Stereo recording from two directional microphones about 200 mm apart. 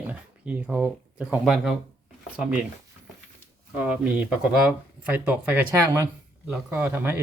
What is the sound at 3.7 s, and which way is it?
Speech, 5° right (ahead or behind).